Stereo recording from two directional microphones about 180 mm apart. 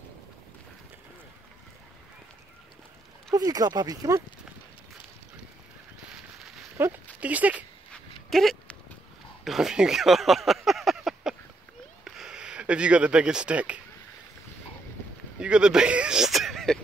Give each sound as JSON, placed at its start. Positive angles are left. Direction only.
{"t": 3.3, "sound": "speech", "side_deg": -20}
{"t": 6.8, "sound": "speech", "side_deg": -10}
{"t": 7.9, "sound": "a sound", "side_deg": 0}
{"t": 15.3, "sound": "speech", "side_deg": -5}